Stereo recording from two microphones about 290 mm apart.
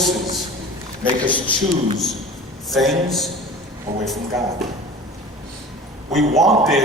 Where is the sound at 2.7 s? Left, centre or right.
Centre.